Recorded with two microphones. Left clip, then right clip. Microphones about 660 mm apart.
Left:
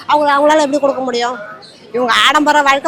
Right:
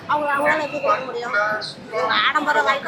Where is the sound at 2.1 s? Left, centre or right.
Left.